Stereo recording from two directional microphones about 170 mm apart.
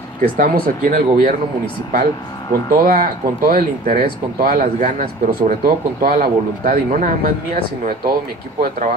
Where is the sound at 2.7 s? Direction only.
60° right (ahead or behind).